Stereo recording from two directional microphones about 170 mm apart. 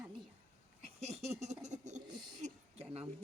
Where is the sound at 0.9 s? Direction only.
40° right (ahead or behind).